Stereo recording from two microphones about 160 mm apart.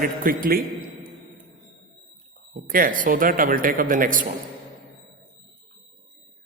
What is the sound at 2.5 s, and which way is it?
A man's voice, 60° right (ahead or behind).